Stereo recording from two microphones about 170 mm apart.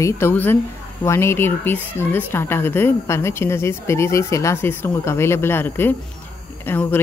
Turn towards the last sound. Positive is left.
turn(degrees=10)  # may be behind; listen again after turning